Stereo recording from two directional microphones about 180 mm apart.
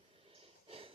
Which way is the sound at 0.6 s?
30° right (ahead or behind).